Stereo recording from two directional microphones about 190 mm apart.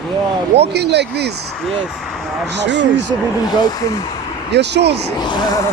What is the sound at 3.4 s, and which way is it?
Speech, 20° left (ahead or behind).